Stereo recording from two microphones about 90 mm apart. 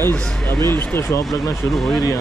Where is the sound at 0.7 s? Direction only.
30° left (ahead or behind).